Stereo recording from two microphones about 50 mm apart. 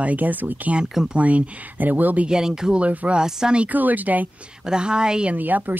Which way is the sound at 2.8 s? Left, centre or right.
Right.